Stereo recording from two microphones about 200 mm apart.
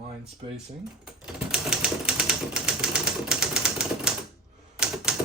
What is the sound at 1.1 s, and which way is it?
Typewriter, 5° right (ahead or behind).